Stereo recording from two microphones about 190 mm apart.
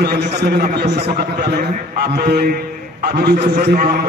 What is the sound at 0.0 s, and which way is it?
A man's voice, 60° right (ahead or behind).